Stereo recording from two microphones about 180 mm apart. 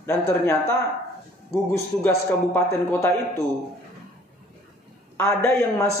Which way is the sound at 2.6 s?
Centre (ahead or behind).